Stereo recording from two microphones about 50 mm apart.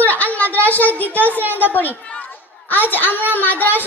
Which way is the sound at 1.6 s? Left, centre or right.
Left.